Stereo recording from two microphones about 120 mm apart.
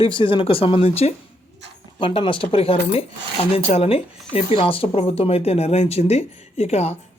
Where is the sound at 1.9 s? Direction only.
45° left (ahead or behind).